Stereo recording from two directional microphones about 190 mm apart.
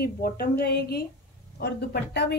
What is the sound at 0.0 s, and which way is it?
A woman's voice, 55° left (ahead or behind).